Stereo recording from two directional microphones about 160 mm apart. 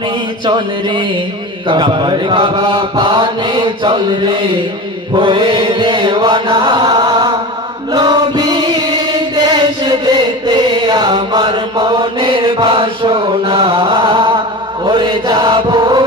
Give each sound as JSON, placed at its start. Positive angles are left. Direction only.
{"t": 0.5, "sound": "a sound", "side_deg": -30}
{"t": 1.7, "sound": "mantra", "side_deg": -30}
{"t": 7.9, "sound": "chant", "side_deg": -25}